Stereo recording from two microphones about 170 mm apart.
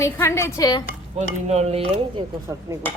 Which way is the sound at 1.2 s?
40° right (ahead or behind).